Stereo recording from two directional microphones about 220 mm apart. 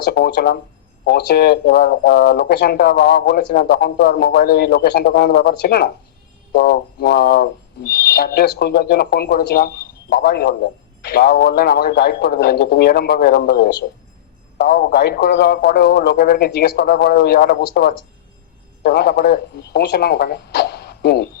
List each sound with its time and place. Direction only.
0.1 s speech: 45° left (ahead or behind)